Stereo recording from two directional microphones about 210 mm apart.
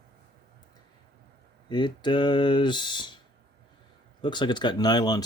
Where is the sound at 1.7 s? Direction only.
20° left (ahead or behind).